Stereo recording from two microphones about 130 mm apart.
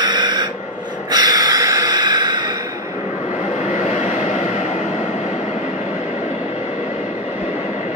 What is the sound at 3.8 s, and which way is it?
Vehicle, 60° left (ahead or behind).